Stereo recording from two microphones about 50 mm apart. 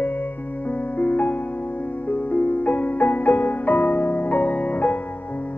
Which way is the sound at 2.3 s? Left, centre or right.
Left.